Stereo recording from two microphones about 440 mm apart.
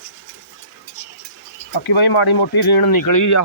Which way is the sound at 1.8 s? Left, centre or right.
Left.